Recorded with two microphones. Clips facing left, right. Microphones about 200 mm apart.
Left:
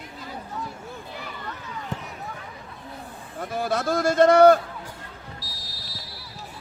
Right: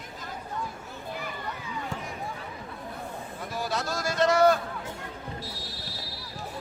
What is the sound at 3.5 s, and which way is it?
Speech, 55° left (ahead or behind).